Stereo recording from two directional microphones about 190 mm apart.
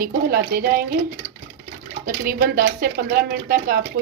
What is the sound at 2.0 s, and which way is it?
Speech, 50° right (ahead or behind).